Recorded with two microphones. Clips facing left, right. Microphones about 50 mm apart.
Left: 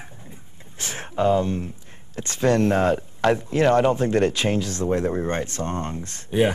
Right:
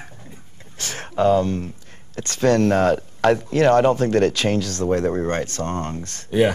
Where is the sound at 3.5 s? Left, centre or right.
Right.